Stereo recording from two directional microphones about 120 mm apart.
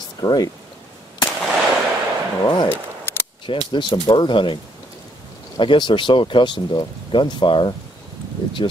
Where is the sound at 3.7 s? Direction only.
40° left (ahead or behind).